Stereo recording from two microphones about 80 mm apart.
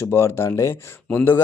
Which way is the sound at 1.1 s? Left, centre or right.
Left.